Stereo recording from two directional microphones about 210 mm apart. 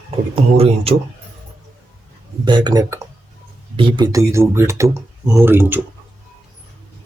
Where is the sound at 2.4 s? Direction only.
20° right (ahead or behind).